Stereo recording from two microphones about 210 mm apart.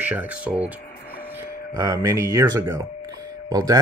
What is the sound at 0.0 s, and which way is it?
Speech, 10° right (ahead or behind).